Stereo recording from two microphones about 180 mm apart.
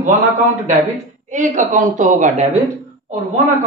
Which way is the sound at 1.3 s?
45° right (ahead or behind).